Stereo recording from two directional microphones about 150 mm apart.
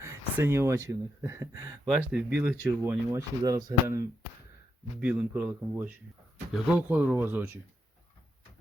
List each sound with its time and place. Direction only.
0.0 s speech: 15° right (ahead or behind)
2.1 s speech: 10° right (ahead or behind)
4.9 s speech: 10° right (ahead or behind)